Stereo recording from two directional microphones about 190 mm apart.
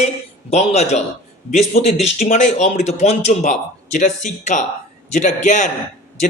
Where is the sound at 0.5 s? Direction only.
35° left (ahead or behind).